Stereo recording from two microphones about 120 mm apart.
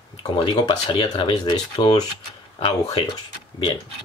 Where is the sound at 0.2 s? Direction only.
40° left (ahead or behind).